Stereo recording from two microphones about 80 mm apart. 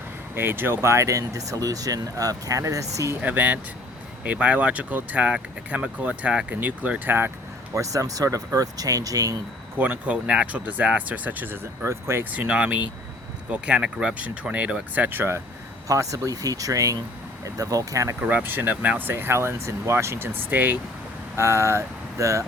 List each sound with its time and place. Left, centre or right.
0.3 s speech: right
3.2 s speech: right
7.7 s speech: right
9.7 s speech: right
12.3 s speech: centre
15.9 s speech: right
18.2 s speech: centre
21.3 s speech: right